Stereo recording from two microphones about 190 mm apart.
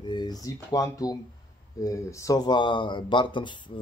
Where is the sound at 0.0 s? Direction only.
25° left (ahead or behind).